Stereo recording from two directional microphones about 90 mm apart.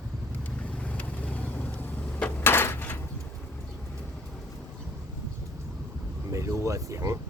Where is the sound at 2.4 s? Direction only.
25° left (ahead or behind).